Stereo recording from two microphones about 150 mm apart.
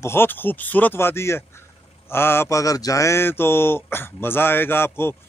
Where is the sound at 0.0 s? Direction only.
15° left (ahead or behind).